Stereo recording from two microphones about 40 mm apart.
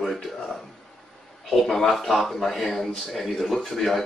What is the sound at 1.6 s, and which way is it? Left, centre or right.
A man's voice, centre.